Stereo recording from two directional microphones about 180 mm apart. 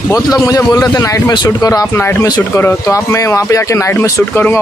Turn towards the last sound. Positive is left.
turn(degrees=10)  # may be behind; listen again after turning